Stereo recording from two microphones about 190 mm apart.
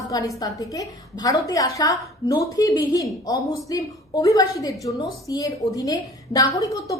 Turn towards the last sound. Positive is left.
turn(degrees=20)  # may be behind; listen again after turning